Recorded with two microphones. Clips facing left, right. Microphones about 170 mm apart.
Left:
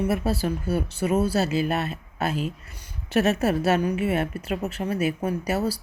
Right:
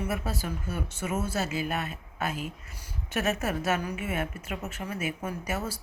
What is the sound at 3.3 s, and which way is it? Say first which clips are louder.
Speech: left 7 dB; 35° left (ahead or behind).